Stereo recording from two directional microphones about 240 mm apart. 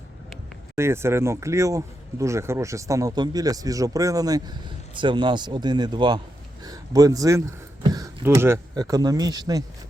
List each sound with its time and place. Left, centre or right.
0.8 s speech: centre